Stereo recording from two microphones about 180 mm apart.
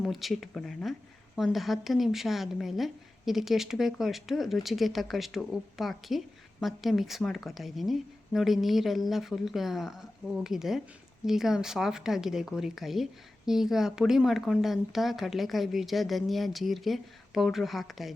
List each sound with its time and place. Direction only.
0.0 s a woman's voice: centre (ahead or behind)